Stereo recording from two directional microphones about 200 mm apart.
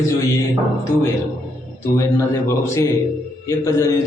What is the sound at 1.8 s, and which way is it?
A man's voice, 15° left (ahead or behind).